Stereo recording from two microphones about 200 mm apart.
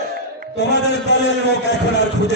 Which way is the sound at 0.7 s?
60° left (ahead or behind).